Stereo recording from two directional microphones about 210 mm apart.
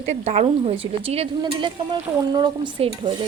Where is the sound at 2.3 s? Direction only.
20° right (ahead or behind).